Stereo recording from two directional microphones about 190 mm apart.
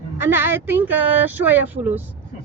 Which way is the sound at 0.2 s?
10° right (ahead or behind).